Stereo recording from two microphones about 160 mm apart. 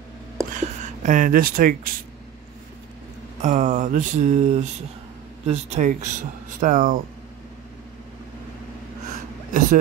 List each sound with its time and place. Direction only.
0.6 s speech: 50° right (ahead or behind)
3.4 s speech: 50° right (ahead or behind)
9.1 s a sound: 50° right (ahead or behind)